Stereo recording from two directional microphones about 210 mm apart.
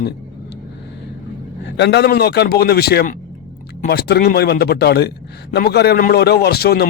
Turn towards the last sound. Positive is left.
turn(degrees=50)  # may be behind; listen again after turning